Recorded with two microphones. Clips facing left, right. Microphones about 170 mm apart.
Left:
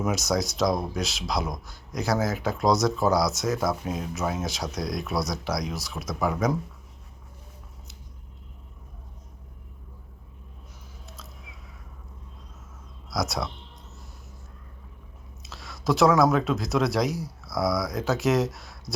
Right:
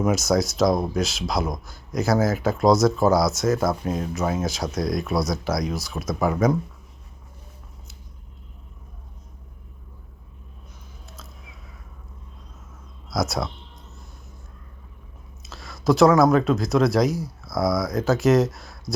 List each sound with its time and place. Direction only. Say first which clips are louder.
0.0 s speech: right 5 dB; centre (ahead or behind)
13.1 s speech: right 3 dB; centre (ahead or behind)
15.4 s speech: right 5 dB; centre (ahead or behind)